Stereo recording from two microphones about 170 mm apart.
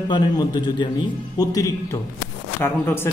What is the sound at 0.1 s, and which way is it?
Speech, 25° left (ahead or behind).